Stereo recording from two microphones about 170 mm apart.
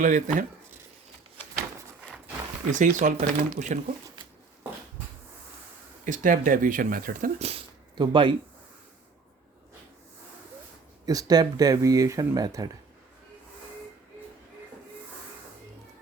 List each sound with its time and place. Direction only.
0.0 s speech: 45° right (ahead or behind)
2.7 s speech: 45° right (ahead or behind)
6.1 s speech: 50° right (ahead or behind)
7.3 s speech: 35° right (ahead or behind)
11.0 s speech: 20° right (ahead or behind)